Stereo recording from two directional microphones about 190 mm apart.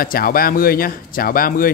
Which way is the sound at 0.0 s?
50° left (ahead or behind).